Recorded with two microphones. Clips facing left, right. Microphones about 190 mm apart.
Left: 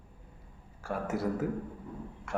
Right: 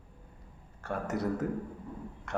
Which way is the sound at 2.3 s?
5° left (ahead or behind).